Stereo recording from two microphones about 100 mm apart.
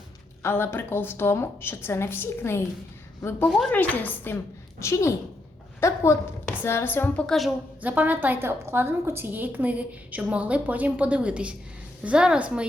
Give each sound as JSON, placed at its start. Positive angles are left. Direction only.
{"t": 0.4, "sound": "a woman's voice", "side_deg": 25}
{"t": 3.7, "sound": "a woman's voice", "side_deg": 15}
{"t": 7.3, "sound": "a woman's voice", "side_deg": 0}
{"t": 7.8, "sound": "a woman's voice", "side_deg": -15}